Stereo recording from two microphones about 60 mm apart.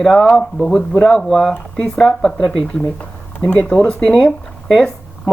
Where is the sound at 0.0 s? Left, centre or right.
Centre.